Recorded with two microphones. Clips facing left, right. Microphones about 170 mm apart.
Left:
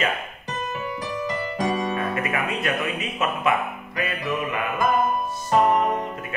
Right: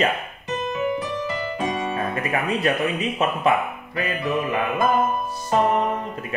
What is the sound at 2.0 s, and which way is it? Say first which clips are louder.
Speech: right 1 dB; 35° right (ahead or behind).